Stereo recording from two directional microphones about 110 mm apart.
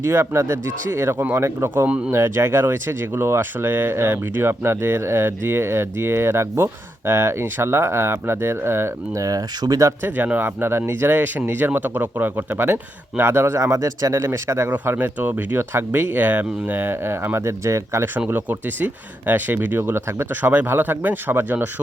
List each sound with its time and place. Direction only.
0.0 s speech: 25° right (ahead or behind)
1.9 s speech: 10° right (ahead or behind)
2.1 s speech: 20° right (ahead or behind)
10.0 s speech: 15° right (ahead or behind)
18.3 s speech: 15° right (ahead or behind)